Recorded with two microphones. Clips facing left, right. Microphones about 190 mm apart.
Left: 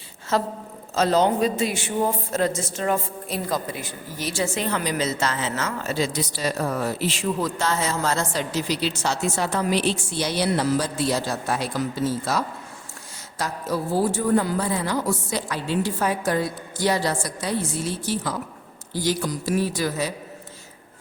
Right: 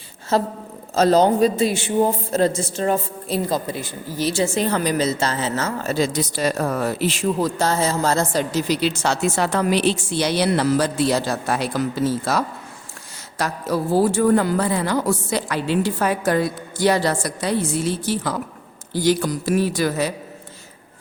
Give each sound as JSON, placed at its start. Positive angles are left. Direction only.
{"t": 0.3, "sound": "a woman's voice", "side_deg": -30}
{"t": 7.3, "sound": "a woman's voice", "side_deg": -35}